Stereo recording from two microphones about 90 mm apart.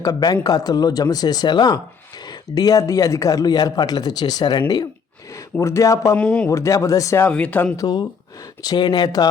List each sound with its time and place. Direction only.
0.0 s a man's voice: 45° left (ahead or behind)
5.3 s speech: 35° left (ahead or behind)
6.1 s speech: 10° left (ahead or behind)
6.5 s speech: 35° left (ahead or behind)
7.3 s speech: 15° left (ahead or behind)
7.8 s a man's voice: 50° left (ahead or behind)